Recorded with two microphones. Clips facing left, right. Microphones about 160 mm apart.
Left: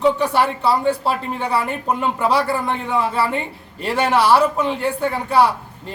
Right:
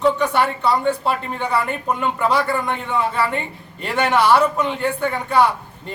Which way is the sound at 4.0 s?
5° left (ahead or behind).